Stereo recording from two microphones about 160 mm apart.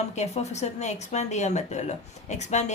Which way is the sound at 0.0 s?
45° left (ahead or behind).